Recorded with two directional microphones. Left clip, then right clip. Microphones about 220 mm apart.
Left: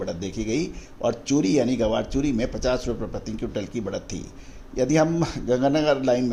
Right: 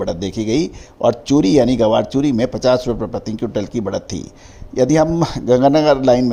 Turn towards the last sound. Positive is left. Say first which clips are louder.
# right 8 dB
turn(degrees=-35)  # may be behind; listen again after turning